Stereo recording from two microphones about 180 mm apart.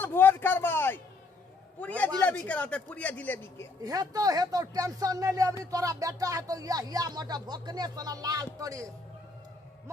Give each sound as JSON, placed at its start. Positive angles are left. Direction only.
{"t": 0.0, "sound": "a sound", "side_deg": 10}
{"t": 1.8, "sound": "a man's voice", "side_deg": 10}
{"t": 3.8, "sound": "speech", "side_deg": -20}